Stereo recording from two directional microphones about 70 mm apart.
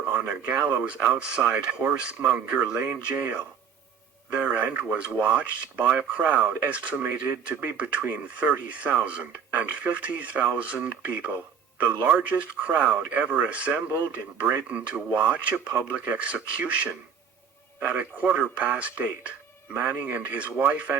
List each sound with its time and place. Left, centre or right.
0.4 s speech: centre